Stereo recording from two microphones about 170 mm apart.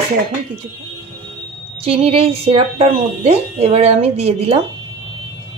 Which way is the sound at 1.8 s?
35° right (ahead or behind).